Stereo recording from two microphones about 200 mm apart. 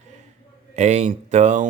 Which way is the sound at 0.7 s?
35° right (ahead or behind).